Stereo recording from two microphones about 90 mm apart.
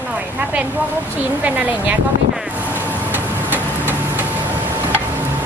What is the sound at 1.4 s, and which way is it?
Speech, 15° right (ahead or behind).